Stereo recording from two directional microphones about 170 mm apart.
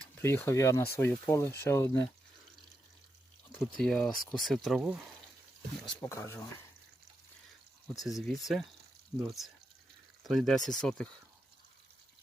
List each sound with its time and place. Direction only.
0.0 s speech: 15° left (ahead or behind)
3.8 s speech: 5° left (ahead or behind)
6.0 s speech: 15° left (ahead or behind)
7.9 s speech: centre (ahead or behind)